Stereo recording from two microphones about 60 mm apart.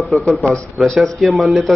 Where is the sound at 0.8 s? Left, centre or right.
Centre.